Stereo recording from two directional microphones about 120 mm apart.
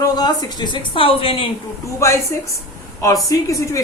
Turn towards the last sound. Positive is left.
turn(degrees=25)  # may be behind; listen again after turning